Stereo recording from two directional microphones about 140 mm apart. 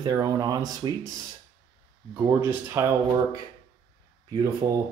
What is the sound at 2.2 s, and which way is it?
Speech, 20° right (ahead or behind).